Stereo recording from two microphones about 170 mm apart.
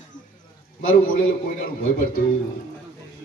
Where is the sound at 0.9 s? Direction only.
60° left (ahead or behind).